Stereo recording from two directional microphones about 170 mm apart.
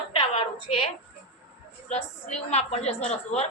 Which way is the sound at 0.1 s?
35° left (ahead or behind).